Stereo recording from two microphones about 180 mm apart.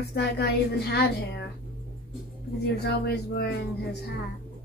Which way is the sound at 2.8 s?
60° left (ahead or behind).